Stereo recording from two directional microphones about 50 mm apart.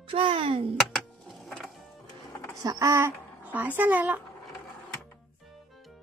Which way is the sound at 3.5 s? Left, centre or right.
Right.